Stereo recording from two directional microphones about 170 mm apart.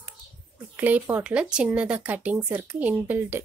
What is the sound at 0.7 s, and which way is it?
Speech, 10° right (ahead or behind).